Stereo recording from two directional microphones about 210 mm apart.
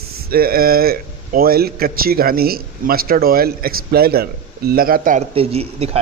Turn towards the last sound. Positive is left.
turn(degrees=-30)  # may be behind; listen again after turning